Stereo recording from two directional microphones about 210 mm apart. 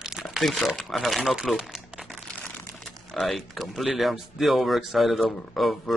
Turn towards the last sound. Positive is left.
turn(degrees=0)  # may be behind; listen again after turning